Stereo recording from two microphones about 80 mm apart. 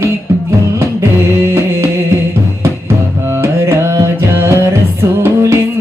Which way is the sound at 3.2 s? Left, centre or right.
Right.